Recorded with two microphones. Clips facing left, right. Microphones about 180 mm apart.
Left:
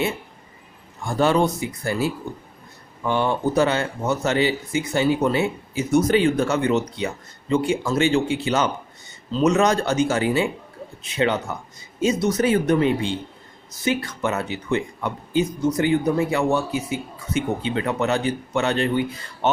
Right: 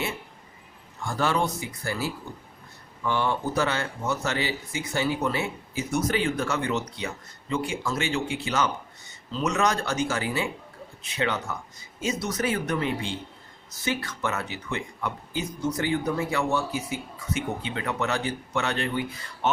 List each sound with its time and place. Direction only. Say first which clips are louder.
1.0 s speech: left 7 dB; 20° left (ahead or behind)